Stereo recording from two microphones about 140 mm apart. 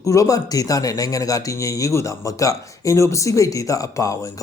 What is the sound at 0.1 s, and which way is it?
Speech, 25° left (ahead or behind).